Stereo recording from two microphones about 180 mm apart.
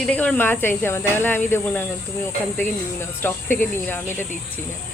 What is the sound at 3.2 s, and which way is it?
Speech, 10° left (ahead or behind).